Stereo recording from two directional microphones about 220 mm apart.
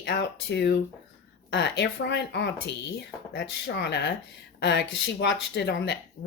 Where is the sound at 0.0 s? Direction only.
50° left (ahead or behind).